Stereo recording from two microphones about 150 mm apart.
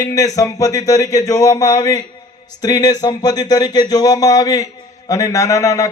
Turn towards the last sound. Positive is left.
turn(degrees=20)  # may be behind; listen again after turning